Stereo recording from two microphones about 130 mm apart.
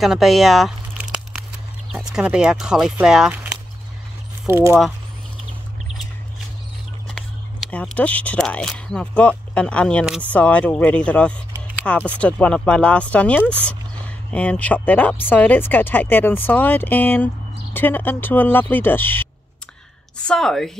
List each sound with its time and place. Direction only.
0.0 s speech: centre (ahead or behind)
1.9 s speech: 5° right (ahead or behind)
4.5 s speech: 20° right (ahead or behind)
7.2 s speech: 5° left (ahead or behind)
20.2 s speech: 5° left (ahead or behind)